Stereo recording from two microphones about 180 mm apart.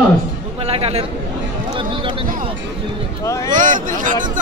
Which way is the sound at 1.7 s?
30° right (ahead or behind).